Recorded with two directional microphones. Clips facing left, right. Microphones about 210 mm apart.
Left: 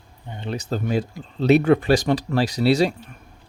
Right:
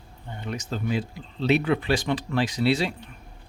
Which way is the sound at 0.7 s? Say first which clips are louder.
Left 4 dB; 45° left (ahead or behind).